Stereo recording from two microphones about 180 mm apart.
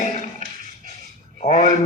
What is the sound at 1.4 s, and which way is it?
Speech, 45° left (ahead or behind).